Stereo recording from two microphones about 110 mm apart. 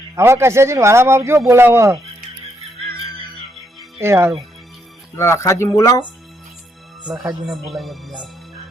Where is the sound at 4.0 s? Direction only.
25° right (ahead or behind).